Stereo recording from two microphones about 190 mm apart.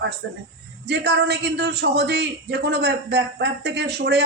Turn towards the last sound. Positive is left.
turn(degrees=-60)  # may be behind; listen again after turning